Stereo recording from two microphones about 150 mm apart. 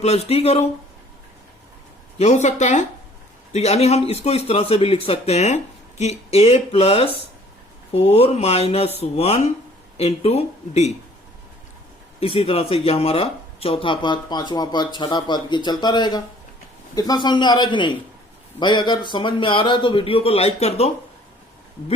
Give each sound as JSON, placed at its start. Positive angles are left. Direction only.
{"t": 0.0, "sound": "a man's voice", "side_deg": 45}
{"t": 2.1, "sound": "a man's voice", "side_deg": 50}
{"t": 12.2, "sound": "speech", "side_deg": 40}